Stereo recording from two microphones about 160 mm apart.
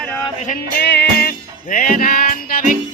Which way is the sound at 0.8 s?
90° left.